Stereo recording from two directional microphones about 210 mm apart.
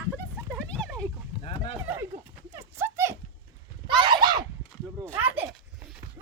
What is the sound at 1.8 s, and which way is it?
Horse, 10° right (ahead or behind).